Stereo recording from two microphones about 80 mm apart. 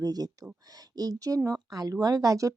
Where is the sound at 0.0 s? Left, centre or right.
Right.